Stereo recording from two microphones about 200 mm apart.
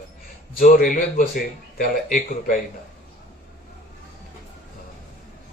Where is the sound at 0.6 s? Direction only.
45° left (ahead or behind).